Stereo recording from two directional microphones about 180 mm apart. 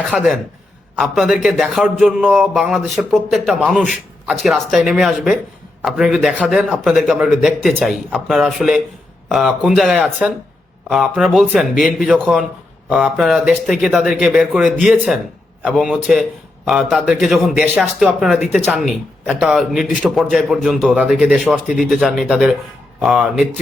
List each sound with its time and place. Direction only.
0.0 s a man's voice: centre (ahead or behind)